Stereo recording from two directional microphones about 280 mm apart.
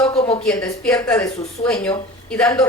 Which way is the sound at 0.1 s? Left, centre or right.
Left.